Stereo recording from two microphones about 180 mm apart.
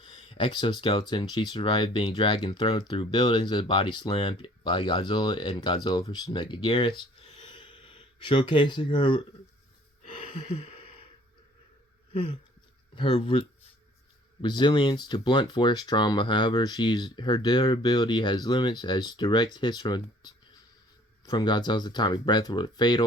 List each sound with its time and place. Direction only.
0.3 s speech: 25° left (ahead or behind)
10.0 s a sound: 35° left (ahead or behind)
12.1 s speech: 30° left (ahead or behind)